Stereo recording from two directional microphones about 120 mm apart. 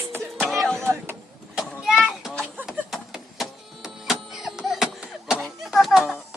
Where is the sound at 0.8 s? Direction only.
20° right (ahead or behind).